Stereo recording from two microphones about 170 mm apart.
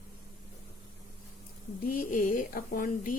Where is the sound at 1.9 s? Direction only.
55° left (ahead or behind).